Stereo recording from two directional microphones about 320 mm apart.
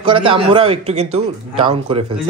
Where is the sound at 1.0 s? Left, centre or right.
Right.